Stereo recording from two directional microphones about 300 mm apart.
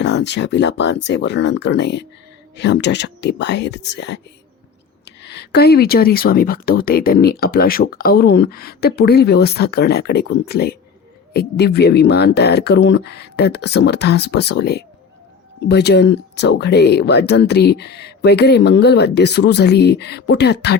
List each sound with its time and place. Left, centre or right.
0.0 s speech: left